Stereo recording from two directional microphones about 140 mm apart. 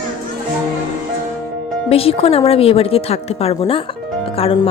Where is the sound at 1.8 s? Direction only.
45° left (ahead or behind).